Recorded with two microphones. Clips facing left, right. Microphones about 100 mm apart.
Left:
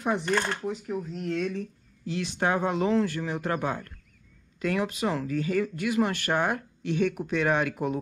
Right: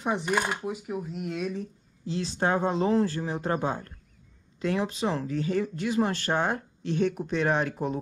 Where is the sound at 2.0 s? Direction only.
60° left (ahead or behind).